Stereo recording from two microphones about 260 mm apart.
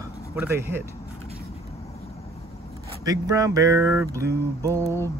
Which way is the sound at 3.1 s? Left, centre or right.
Centre.